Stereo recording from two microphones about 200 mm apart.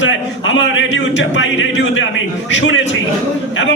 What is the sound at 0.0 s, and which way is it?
A man's voice, 70° left (ahead or behind).